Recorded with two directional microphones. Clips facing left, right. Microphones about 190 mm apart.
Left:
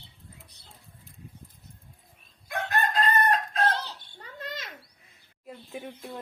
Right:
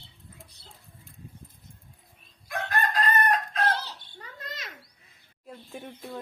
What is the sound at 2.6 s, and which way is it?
Chicken, 25° left (ahead or behind).